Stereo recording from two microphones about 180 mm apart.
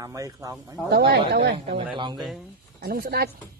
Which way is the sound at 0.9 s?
65° right (ahead or behind).